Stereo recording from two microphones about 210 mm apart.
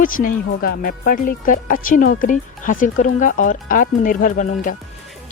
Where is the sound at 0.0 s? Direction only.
40° left (ahead or behind).